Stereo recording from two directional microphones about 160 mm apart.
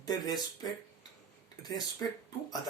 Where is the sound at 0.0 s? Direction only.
25° left (ahead or behind).